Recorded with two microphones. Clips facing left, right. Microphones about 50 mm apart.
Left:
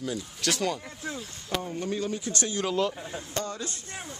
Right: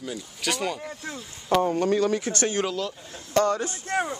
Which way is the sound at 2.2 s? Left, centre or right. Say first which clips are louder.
Right 5 dB; right.